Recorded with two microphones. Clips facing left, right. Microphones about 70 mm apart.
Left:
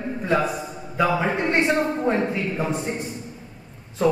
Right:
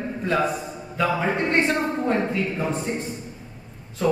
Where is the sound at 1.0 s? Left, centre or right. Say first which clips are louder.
Left 1 dB; centre.